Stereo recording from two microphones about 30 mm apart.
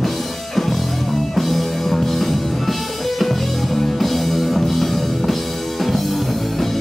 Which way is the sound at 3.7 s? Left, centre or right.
Centre.